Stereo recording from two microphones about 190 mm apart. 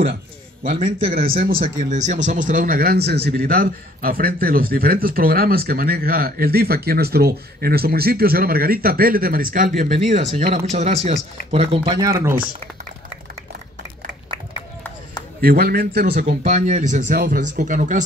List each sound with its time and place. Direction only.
1.1 s a man's voice: 50° right (ahead or behind); by 12.0 s 30° right (ahead or behind)
12.0 s speech: 15° right (ahead or behind)
15.4 s a man's voice: 55° right (ahead or behind)